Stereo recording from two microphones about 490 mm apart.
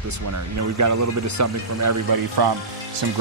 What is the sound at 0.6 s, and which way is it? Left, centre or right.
Speech, right.